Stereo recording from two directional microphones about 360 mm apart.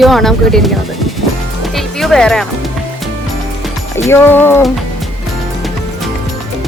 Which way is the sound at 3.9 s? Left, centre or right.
Centre.